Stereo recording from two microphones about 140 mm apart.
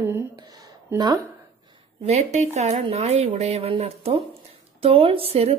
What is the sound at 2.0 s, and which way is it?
A woman's voice, 55° right (ahead or behind).